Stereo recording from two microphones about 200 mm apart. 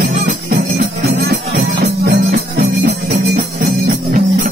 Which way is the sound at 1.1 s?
55° right (ahead or behind).